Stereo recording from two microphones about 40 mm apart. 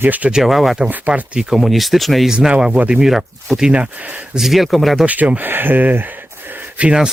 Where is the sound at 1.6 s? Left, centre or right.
Centre.